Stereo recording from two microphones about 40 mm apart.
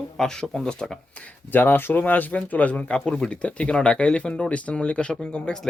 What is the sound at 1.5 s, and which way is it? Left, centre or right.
Speech, left.